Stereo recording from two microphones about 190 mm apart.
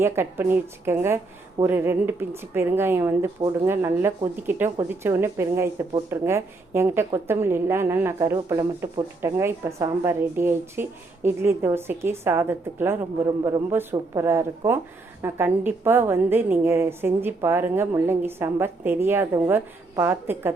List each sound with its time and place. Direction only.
0.0 s speech: 10° right (ahead or behind)